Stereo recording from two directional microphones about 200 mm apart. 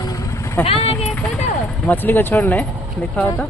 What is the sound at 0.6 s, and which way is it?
Speech, 30° left (ahead or behind).